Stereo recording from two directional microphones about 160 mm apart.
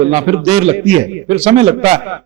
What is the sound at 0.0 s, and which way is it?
A man's voice, 40° right (ahead or behind).